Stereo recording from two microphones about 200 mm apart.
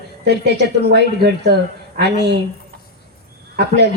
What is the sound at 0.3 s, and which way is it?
A woman's voice, 55° right (ahead or behind).